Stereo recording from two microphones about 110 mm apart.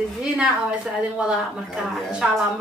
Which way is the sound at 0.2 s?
10° right (ahead or behind).